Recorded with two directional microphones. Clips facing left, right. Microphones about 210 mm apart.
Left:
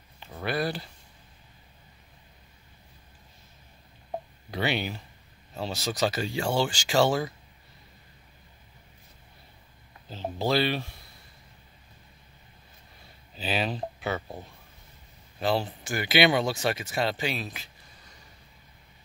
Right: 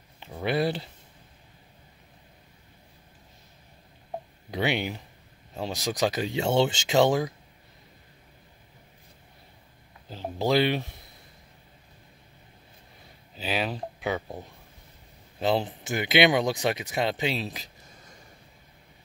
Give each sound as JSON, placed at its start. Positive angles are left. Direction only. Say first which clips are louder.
{"t": 0.3, "sound": "speech", "louder": "right 3 dB", "side_deg": -20}
{"t": 4.5, "sound": "speech", "louder": "right 2 dB", "side_deg": -15}
{"t": 10.0, "sound": "a sound", "louder": "right 2 dB", "side_deg": -15}
{"t": 13.4, "sound": "speech", "louder": "even", "side_deg": -10}